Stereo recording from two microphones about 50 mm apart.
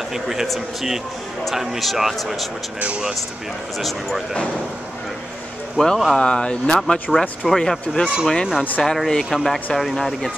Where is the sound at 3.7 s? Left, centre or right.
Centre.